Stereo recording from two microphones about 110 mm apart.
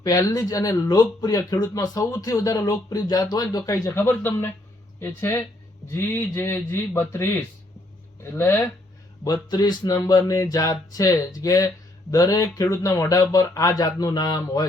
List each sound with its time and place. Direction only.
0.0 s speech: 35° left (ahead or behind)
3.9 s a man's voice: 20° left (ahead or behind)
9.2 s speech: 35° left (ahead or behind)